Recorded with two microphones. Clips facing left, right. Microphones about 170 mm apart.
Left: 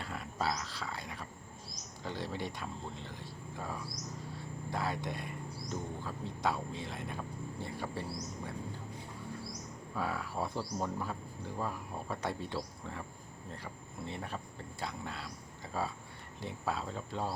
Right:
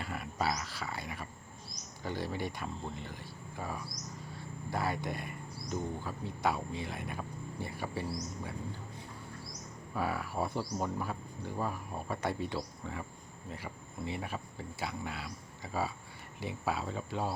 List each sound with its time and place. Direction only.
0.0 s speech: 5° right (ahead or behind)
9.9 s speech: 5° right (ahead or behind)